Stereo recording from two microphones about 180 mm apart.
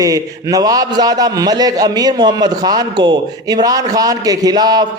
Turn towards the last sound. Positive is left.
turn(degrees=-20)  # may be behind; listen again after turning